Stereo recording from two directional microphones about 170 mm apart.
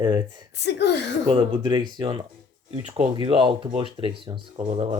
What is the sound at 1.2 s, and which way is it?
Speech, 30° right (ahead or behind).